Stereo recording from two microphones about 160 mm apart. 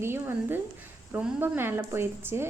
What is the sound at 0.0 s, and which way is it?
Speech, 15° right (ahead or behind).